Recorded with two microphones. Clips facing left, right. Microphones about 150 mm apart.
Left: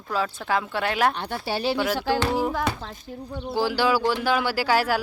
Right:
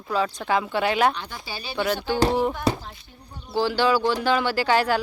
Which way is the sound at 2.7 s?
35° right (ahead or behind).